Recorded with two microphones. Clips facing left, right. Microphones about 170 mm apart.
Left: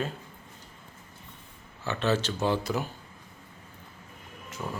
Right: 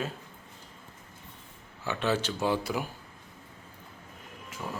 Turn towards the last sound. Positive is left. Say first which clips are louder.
# left 2 dB
turn(degrees=0)  # may be behind; listen again after turning